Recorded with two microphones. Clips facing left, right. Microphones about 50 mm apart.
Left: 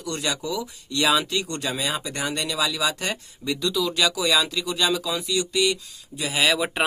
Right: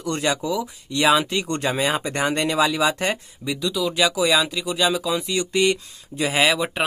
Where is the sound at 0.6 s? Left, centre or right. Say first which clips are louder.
Right 3 dB; right.